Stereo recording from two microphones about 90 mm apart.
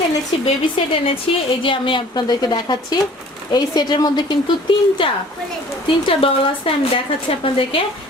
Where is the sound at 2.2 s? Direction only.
50° left (ahead or behind).